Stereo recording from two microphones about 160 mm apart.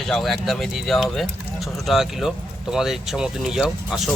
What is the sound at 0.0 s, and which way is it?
Speech, centre (ahead or behind).